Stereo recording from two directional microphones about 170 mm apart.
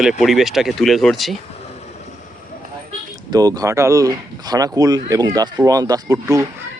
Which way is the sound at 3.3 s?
20° right (ahead or behind).